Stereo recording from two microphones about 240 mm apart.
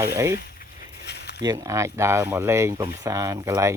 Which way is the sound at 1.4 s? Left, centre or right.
Centre.